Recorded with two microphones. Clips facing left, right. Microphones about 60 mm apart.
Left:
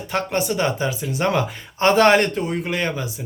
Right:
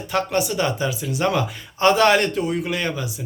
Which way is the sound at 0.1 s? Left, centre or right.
Left.